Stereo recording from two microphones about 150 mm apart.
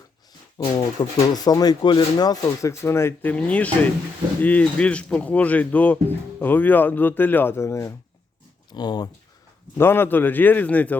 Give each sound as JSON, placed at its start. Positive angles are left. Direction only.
{"t": 0.6, "sound": "speech", "side_deg": 30}
{"t": 9.7, "sound": "speech", "side_deg": 15}